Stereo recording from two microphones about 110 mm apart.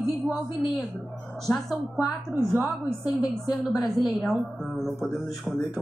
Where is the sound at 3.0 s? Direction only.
35° left (ahead or behind).